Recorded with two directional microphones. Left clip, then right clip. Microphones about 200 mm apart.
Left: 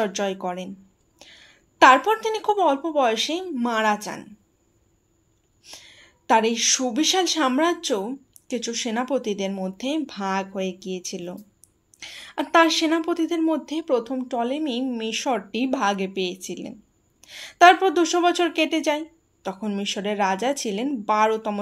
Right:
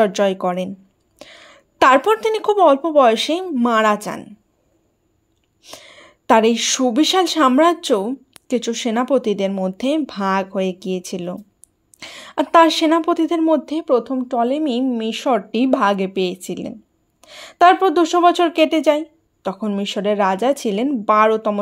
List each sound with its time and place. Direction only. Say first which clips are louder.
0.0 s a woman's voice: right 9 dB; 45° right (ahead or behind)
5.6 s a woman's voice: right 5 dB; 45° right (ahead or behind)